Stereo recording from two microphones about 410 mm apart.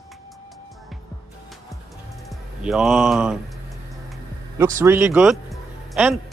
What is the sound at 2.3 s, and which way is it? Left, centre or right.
Speech, centre.